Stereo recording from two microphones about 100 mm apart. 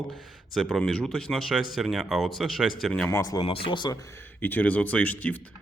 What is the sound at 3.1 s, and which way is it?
Speech, 35° left (ahead or behind).